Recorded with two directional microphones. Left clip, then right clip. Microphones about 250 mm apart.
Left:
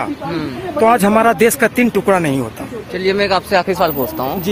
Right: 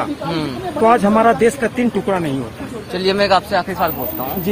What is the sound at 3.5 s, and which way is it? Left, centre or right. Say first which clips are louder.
Speech: left 4 dB; left.